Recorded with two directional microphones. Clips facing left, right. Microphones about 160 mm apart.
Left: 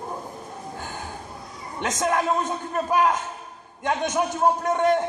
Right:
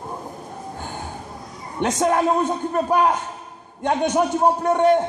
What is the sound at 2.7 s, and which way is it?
A man's voice, 30° right (ahead or behind).